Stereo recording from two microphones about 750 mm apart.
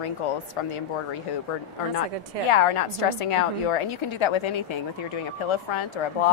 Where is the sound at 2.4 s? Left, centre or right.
Left.